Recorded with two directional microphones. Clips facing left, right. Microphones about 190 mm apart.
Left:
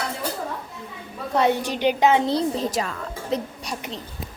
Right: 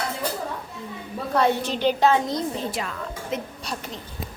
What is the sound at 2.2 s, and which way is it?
A woman's voice, 30° left (ahead or behind).